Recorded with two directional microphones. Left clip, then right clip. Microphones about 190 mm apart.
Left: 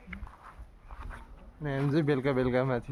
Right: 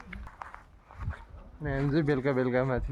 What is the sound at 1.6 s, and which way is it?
Speech, centre (ahead or behind).